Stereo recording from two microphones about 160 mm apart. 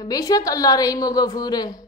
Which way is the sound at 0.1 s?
20° left (ahead or behind).